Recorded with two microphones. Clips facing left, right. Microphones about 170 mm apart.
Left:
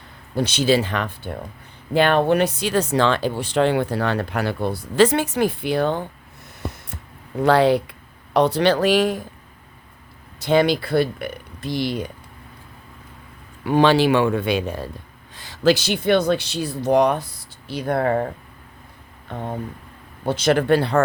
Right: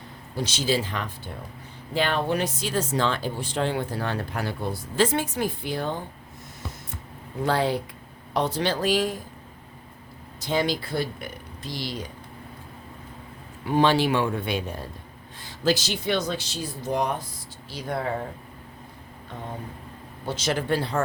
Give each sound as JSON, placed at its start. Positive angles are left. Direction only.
{"t": 0.3, "sound": "speech", "side_deg": 65}
{"t": 6.6, "sound": "a sound", "side_deg": 55}
{"t": 7.4, "sound": "speech", "side_deg": 70}
{"t": 10.4, "sound": "speech", "side_deg": 65}
{"t": 13.7, "sound": "speech", "side_deg": 85}
{"t": 15.4, "sound": "speech", "side_deg": 80}
{"t": 17.7, "sound": "speech", "side_deg": 60}
{"t": 20.2, "sound": "speech", "side_deg": 60}